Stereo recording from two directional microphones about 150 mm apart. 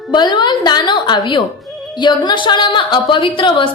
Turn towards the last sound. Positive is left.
turn(degrees=35)  # may be behind; listen again after turning